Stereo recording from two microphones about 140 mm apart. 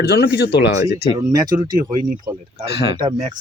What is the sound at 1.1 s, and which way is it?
Speech, 30° right (ahead or behind).